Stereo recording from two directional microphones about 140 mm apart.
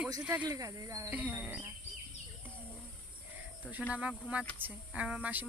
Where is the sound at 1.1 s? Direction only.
10° right (ahead or behind).